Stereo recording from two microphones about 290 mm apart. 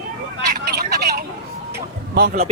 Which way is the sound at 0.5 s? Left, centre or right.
Right.